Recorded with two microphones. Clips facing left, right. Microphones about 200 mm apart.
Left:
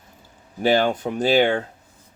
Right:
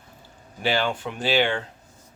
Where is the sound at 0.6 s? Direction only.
40° left (ahead or behind).